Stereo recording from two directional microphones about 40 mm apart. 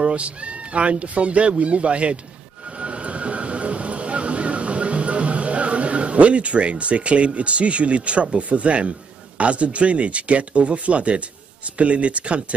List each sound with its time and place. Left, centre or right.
0.0 s speech: right
2.8 s a sound: right
9.4 s speech: right